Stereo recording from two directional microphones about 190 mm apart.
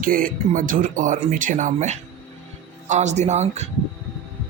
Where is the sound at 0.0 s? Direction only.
45° right (ahead or behind).